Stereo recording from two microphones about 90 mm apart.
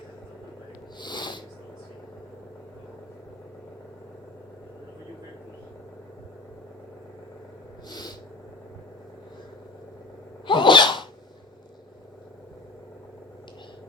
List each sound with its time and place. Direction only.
0.9 s sniff: 55° left (ahead or behind)
7.9 s owl: 50° left (ahead or behind)
10.4 s sneeze: 65° left (ahead or behind)